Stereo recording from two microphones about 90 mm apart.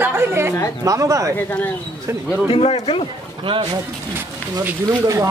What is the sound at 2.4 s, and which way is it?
Speech, 90° left.